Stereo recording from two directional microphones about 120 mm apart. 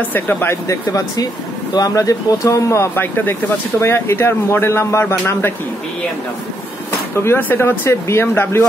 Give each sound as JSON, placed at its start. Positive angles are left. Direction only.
{"t": 0.1, "sound": "speech", "side_deg": 15}
{"t": 7.2, "sound": "speech", "side_deg": 20}